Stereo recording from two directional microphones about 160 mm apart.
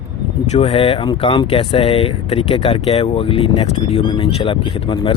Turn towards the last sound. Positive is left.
turn(degrees=35)  # may be behind; listen again after turning